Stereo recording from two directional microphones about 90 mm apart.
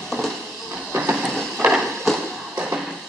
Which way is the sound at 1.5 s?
10° right (ahead or behind).